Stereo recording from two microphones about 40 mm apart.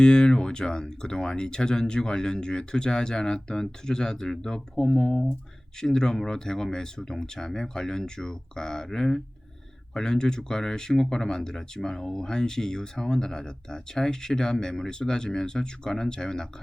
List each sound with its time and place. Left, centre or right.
0.0 s speech: left